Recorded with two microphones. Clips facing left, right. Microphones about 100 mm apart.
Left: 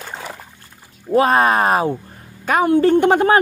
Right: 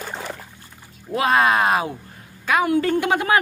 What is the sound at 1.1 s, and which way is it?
A woman's voice, 40° left (ahead or behind).